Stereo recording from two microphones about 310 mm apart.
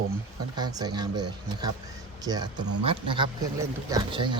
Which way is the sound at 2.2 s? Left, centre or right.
Centre.